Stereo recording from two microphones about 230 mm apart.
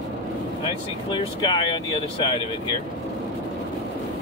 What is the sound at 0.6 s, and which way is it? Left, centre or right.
Speech, centre.